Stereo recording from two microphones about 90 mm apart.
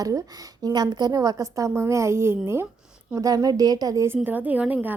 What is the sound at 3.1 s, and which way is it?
Speech, 40° right (ahead or behind).